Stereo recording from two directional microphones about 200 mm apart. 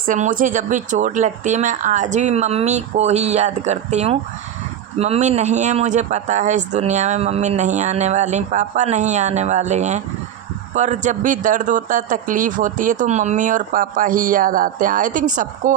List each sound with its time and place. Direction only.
0.0 s speech: 40° right (ahead or behind)